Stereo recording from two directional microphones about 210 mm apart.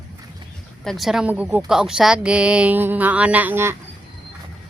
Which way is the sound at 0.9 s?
Centre (ahead or behind).